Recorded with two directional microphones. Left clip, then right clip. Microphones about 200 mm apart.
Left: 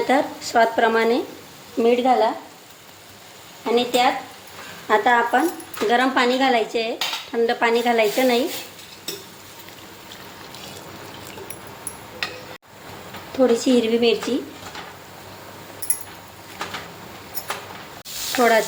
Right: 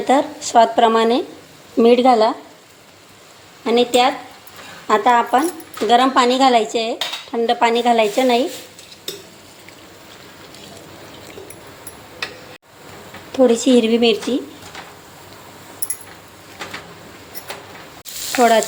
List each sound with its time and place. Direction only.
0.1 s speech: 15° right (ahead or behind)
1.8 s speech: 35° right (ahead or behind)
3.7 s speech: 30° right (ahead or behind)
13.3 s speech: 25° right (ahead or behind)
18.3 s a sound: 20° right (ahead or behind)